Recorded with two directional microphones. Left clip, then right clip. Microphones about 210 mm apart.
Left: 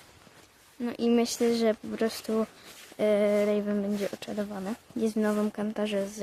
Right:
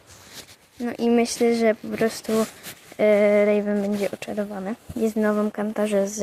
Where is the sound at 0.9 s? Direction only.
10° right (ahead or behind).